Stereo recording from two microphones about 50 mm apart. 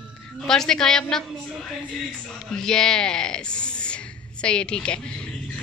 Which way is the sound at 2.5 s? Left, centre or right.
Centre.